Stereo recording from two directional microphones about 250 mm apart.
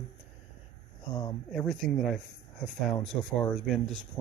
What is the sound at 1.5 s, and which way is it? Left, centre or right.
Speech, centre.